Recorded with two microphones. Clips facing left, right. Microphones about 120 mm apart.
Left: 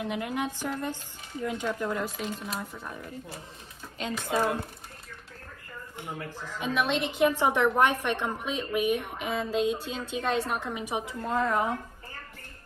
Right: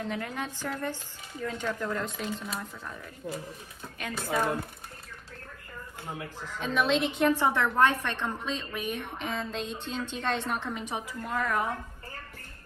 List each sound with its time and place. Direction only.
0.0 s a woman's voice: 15° left (ahead or behind)
2.7 s a woman's voice: 15° left (ahead or behind)
6.4 s a woman's voice: 5° left (ahead or behind)
7.3 s a woman's voice: 15° left (ahead or behind)
11.2 s speech: 25° left (ahead or behind)